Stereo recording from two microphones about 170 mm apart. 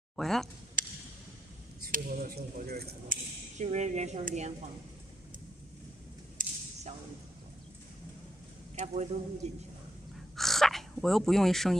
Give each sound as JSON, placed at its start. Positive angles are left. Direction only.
{"t": 0.1, "sound": "speech", "side_deg": 0}
{"t": 1.9, "sound": "speech", "side_deg": -60}
{"t": 3.5, "sound": "speech", "side_deg": -45}
{"t": 6.3, "sound": "a sound", "side_deg": -40}
{"t": 8.7, "sound": "a man's voice", "side_deg": -40}
{"t": 10.3, "sound": "a sound", "side_deg": 0}